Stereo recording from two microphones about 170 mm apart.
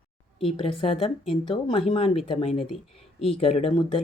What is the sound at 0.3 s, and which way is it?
Speech, 35° left (ahead or behind).